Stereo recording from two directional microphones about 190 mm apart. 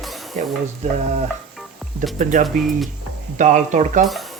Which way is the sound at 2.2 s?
40° right (ahead or behind).